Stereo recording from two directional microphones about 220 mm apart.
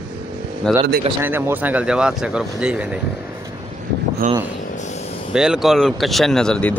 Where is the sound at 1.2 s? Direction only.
10° right (ahead or behind).